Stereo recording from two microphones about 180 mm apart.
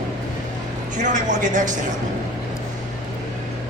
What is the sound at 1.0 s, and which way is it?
Speech, 45° right (ahead or behind).